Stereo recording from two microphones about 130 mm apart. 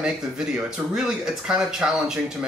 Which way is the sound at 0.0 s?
5° right (ahead or behind).